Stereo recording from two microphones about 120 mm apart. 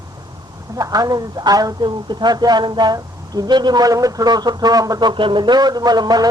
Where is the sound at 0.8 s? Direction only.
30° right (ahead or behind).